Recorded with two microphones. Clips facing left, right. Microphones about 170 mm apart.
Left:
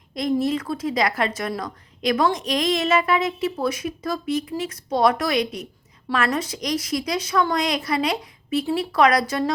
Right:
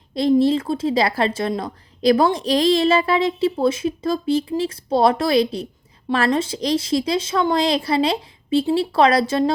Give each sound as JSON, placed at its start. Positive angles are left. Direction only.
{"t": 0.1, "sound": "a woman's voice", "side_deg": -30}